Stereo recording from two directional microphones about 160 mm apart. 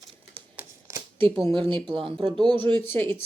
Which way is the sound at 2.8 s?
15° left (ahead or behind).